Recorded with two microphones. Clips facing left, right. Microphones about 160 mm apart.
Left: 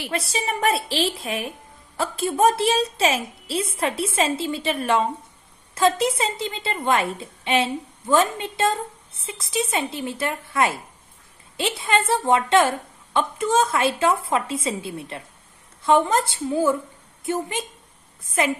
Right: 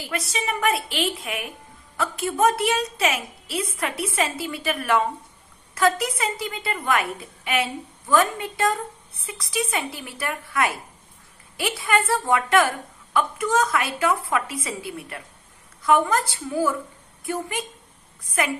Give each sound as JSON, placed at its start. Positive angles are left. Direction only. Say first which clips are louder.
{"t": 0.1, "sound": "a woman's voice", "louder": "left 1 dB", "side_deg": 30}